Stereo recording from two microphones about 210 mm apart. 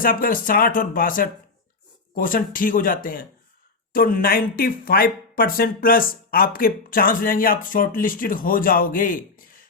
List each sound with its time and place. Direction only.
0.0 s speech: 40° left (ahead or behind)